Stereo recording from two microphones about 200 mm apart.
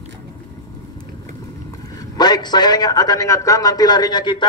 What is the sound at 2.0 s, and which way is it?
A man's voice, 20° left (ahead or behind).